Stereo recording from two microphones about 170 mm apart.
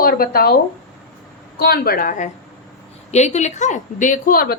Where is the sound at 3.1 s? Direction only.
40° left (ahead or behind); by 4.6 s 60° left (ahead or behind).